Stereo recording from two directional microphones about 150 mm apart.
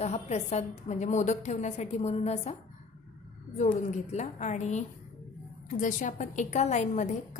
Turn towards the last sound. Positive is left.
turn(degrees=55)  # may be behind; listen again after turning